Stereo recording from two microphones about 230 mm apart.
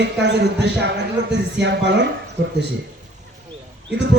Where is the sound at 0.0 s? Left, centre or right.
Right.